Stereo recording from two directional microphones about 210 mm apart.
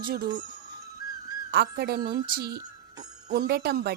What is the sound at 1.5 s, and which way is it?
Speech, 50° right (ahead or behind).